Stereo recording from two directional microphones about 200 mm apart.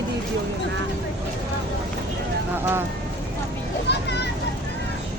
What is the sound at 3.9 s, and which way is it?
Children playing, 55° left (ahead or behind).